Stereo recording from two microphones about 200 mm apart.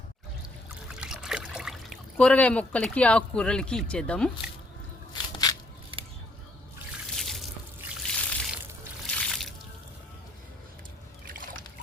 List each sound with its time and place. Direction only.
0.9 s speech: 5° right (ahead or behind)
5.1 s a sound: 20° left (ahead or behind)
7.1 s drip: centre (ahead or behind)
7.9 s trickle: 5° left (ahead or behind)
9.1 s water: centre (ahead or behind)
11.3 s splash: 45° right (ahead or behind)